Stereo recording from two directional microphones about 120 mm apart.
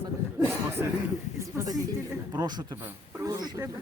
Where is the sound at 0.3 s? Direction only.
20° right (ahead or behind).